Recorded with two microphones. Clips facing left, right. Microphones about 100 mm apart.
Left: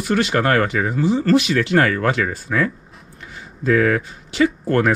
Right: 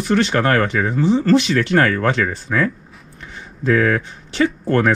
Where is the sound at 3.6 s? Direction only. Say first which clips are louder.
Even; 35° right (ahead or behind).